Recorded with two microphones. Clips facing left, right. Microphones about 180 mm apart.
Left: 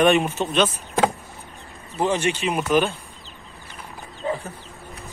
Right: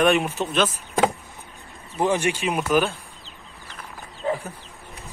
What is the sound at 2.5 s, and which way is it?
Speech, centre (ahead or behind).